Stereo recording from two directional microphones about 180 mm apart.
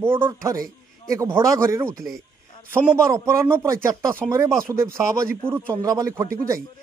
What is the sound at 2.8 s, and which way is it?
Speech, 15° right (ahead or behind).